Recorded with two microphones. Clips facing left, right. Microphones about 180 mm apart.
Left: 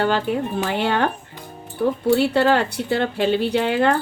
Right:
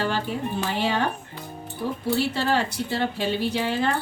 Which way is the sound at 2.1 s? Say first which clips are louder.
Left 7 dB; 65° left (ahead or behind).